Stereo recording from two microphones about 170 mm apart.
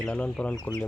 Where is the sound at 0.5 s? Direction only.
20° left (ahead or behind).